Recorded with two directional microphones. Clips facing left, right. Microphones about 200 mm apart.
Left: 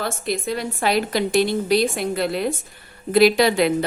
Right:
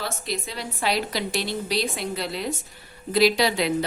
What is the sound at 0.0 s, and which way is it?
A woman's voice, 50° left (ahead or behind).